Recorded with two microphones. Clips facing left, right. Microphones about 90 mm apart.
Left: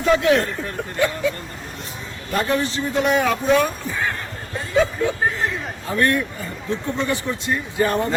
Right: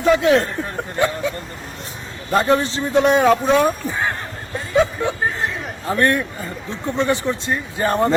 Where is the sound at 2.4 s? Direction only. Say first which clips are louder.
Right 4 dB; 30° right (ahead or behind).